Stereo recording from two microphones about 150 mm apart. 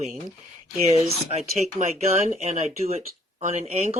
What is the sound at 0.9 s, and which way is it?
Speech, 45° right (ahead or behind).